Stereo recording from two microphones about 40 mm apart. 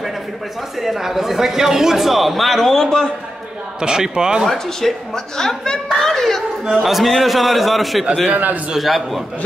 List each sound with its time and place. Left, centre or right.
0.7 s a man's voice: centre
3.8 s a man's voice: centre
4.5 s a woman's voice: centre
6.6 s a man's voice: centre
8.3 s a man's voice: right
8.7 s a man's voice: centre